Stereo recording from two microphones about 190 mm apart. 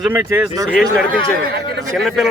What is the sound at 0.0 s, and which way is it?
Speech, 10° right (ahead or behind).